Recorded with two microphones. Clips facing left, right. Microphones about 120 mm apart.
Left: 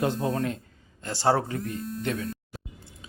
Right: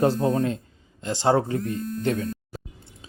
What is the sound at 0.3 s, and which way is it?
Speech, 25° right (ahead or behind).